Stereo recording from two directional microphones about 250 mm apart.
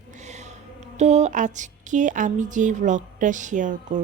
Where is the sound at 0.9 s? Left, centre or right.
Right.